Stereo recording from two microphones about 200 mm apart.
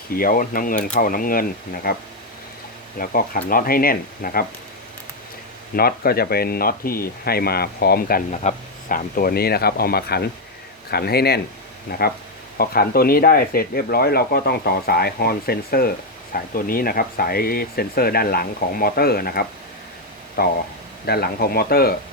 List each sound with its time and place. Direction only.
0.2 s speech: 45° left (ahead or behind)
3.0 s speech: 45° left (ahead or behind)
5.7 s speech: 50° left (ahead or behind)